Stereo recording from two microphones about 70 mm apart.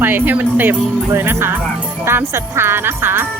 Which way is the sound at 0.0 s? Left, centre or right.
Right.